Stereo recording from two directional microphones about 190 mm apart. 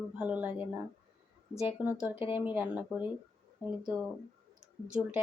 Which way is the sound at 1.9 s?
5° right (ahead or behind).